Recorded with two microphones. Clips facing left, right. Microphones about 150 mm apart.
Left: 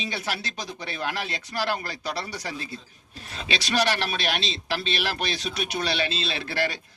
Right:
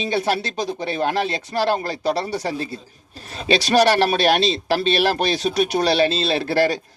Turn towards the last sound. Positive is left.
turn(degrees=-40)  # may be behind; listen again after turning